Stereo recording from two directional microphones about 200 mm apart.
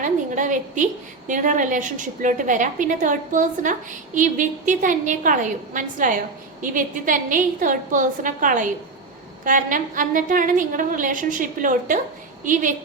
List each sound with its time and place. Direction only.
0.0 s a woman's voice: 40° right (ahead or behind)